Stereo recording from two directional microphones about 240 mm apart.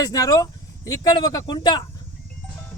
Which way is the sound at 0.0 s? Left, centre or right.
Centre.